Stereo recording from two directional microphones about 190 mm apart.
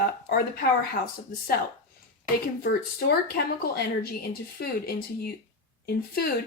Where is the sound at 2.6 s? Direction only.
55° left (ahead or behind).